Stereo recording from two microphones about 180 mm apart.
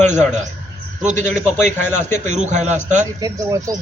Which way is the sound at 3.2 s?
20° right (ahead or behind).